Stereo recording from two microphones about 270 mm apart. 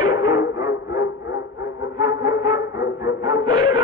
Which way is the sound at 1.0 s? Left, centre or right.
Left.